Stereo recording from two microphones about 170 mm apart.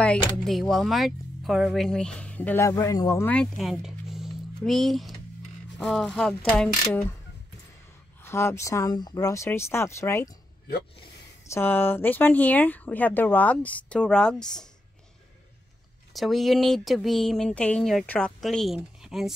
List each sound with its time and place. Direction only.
0.0 s speech: 5° left (ahead or behind)
3.3 s speech: centre (ahead or behind)
8.2 s speech: 15° left (ahead or behind)
11.5 s speech: 15° left (ahead or behind)
16.1 s speech: centre (ahead or behind)